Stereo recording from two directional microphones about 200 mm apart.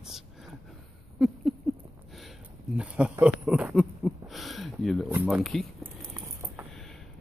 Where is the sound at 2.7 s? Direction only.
5° right (ahead or behind).